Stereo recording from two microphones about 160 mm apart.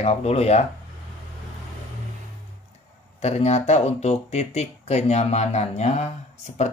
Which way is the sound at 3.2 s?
40° left (ahead or behind).